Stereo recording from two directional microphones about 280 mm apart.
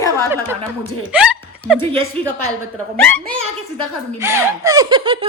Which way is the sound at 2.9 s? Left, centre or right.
Centre.